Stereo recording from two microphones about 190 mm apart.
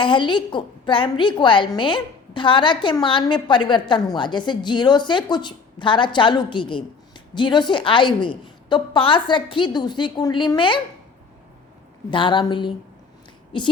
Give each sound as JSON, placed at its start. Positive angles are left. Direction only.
{"t": 0.0, "sound": "a woman's voice", "side_deg": 25}
{"t": 12.1, "sound": "a woman's voice", "side_deg": 25}